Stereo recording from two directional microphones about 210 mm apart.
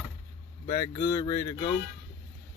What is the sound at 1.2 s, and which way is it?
Speech, 25° left (ahead or behind).